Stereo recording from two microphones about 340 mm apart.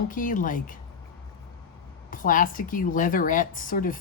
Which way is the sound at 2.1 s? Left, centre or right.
Left.